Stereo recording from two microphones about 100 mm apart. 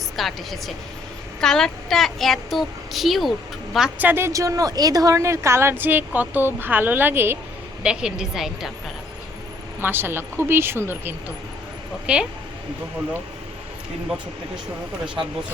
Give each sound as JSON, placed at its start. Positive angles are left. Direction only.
{"t": 0.2, "sound": "a child's voice", "side_deg": 0}
{"t": 3.9, "sound": "a woman's voice", "side_deg": -20}
{"t": 7.9, "sound": "a child's voice", "side_deg": -5}
{"t": 9.8, "sound": "a woman's voice", "side_deg": -20}
{"t": 12.0, "sound": "speech", "side_deg": -10}
{"t": 15.0, "sound": "speech", "side_deg": -10}